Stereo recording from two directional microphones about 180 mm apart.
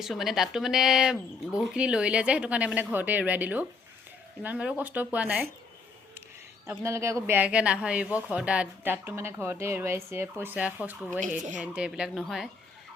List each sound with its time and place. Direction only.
0.0 s speech: centre (ahead or behind)
6.7 s speech: 15° right (ahead or behind)